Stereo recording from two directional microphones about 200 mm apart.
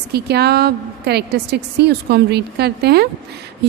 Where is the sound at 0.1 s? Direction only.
55° right (ahead or behind).